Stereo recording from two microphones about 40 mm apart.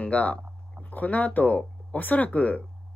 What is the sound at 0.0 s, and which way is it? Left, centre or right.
Speech, left.